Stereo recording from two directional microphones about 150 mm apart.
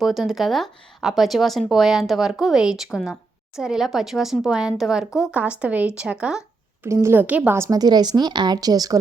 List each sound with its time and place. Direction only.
0.0 s speech: centre (ahead or behind)
6.8 s a woman's voice: 15° right (ahead or behind)